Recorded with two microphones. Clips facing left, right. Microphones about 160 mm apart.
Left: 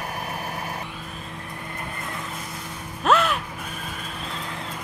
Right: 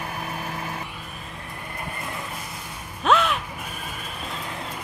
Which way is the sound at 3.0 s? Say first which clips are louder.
Even; centre (ahead or behind).